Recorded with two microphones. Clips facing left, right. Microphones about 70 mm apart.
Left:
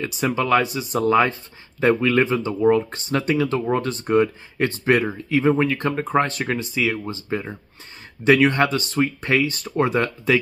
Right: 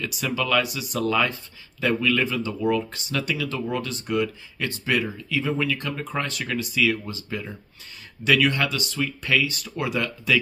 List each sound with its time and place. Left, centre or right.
0.0 s speech: left